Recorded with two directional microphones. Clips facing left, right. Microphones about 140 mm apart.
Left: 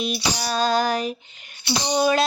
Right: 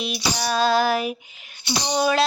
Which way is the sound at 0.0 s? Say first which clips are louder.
Even; centre (ahead or behind).